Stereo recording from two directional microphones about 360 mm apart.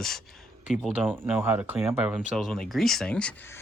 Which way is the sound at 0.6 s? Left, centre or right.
Centre.